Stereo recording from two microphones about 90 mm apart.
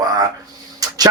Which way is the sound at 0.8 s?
45° right (ahead or behind).